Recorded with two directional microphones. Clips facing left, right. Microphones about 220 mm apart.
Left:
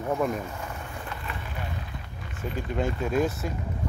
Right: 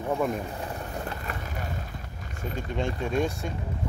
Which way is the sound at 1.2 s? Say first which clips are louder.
Right 1 dB; 45° right (ahead or behind).